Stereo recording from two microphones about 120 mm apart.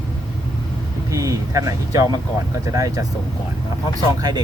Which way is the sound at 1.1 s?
25° right (ahead or behind).